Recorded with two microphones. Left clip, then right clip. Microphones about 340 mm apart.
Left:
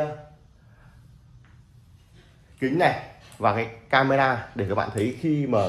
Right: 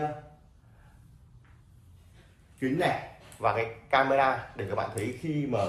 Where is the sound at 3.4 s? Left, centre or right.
Left.